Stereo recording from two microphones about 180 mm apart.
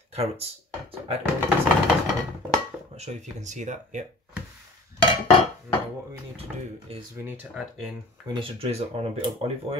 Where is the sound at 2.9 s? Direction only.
40° right (ahead or behind).